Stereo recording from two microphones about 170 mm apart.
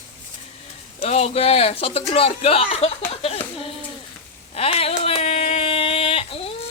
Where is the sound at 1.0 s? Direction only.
35° left (ahead or behind).